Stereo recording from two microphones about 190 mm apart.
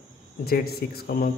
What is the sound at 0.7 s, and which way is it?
Speech, 55° left (ahead or behind).